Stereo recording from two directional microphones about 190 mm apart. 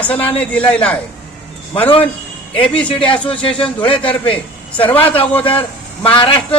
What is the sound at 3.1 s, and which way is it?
A man's voice, 30° left (ahead or behind).